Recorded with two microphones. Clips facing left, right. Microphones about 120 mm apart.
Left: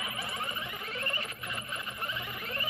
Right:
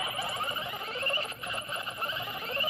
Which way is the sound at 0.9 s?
30° right (ahead or behind).